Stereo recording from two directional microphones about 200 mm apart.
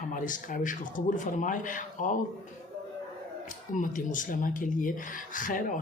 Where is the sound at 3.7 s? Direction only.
40° left (ahead or behind).